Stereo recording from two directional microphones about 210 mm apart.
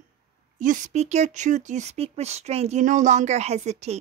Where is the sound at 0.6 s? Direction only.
35° right (ahead or behind).